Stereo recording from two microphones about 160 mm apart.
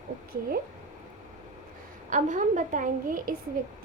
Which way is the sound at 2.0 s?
50° right (ahead or behind).